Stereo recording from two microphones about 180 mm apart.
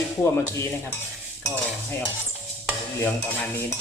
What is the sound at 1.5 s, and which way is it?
Cutlery, 10° left (ahead or behind).